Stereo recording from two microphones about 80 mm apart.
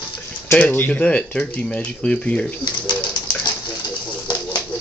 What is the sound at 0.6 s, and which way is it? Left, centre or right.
Speech, left.